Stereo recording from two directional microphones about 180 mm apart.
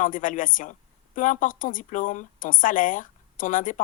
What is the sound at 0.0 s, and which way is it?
A woman's voice, 45° left (ahead or behind).